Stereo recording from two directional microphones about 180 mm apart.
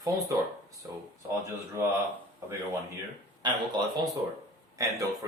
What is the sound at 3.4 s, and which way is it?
A man's voice, 25° right (ahead or behind).